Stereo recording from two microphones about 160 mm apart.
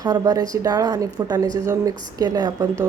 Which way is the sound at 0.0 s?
25° right (ahead or behind).